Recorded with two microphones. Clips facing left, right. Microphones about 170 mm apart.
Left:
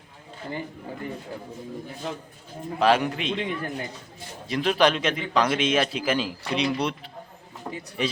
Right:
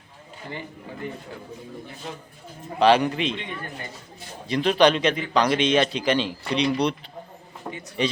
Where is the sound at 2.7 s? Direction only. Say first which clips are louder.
Right 3 dB; centre (ahead or behind).